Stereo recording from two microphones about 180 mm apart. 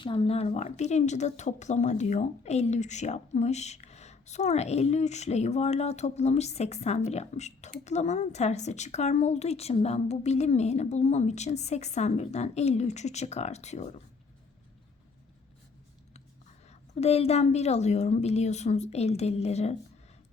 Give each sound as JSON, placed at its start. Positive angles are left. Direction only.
{"t": 0.0, "sound": "speech", "side_deg": 30}
{"t": 16.6, "sound": "speech", "side_deg": 35}